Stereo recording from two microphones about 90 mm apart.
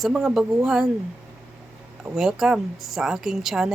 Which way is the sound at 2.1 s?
5° right (ahead or behind).